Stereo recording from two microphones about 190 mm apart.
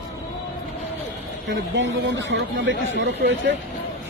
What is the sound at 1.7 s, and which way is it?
Speech, 75° right (ahead or behind).